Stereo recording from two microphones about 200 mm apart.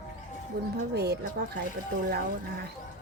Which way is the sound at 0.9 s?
55° right (ahead or behind).